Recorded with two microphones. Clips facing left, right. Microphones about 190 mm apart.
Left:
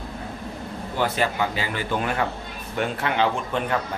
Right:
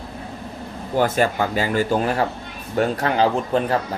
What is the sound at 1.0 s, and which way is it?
Speech, 45° right (ahead or behind).